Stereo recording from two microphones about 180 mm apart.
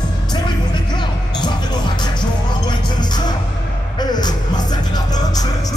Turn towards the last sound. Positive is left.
turn(degrees=25)  # may be behind; listen again after turning